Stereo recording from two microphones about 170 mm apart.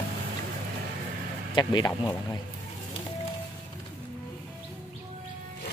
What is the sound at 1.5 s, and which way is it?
Speech, 25° left (ahead or behind).